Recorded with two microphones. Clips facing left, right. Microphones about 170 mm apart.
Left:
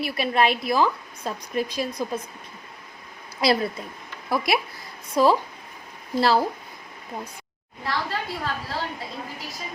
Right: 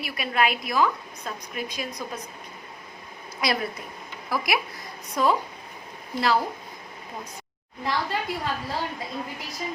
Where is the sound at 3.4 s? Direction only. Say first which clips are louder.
Left 5 dB; 30° left (ahead or behind).